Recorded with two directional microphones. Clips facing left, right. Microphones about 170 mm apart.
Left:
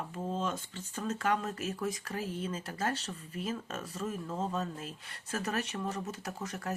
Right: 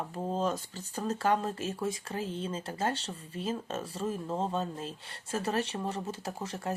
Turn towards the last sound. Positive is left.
turn(degrees=-30)  # may be behind; listen again after turning